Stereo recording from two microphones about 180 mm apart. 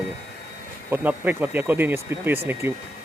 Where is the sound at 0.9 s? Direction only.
10° right (ahead or behind).